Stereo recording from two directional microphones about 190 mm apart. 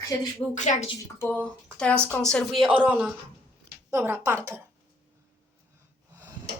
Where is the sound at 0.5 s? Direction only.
40° left (ahead or behind).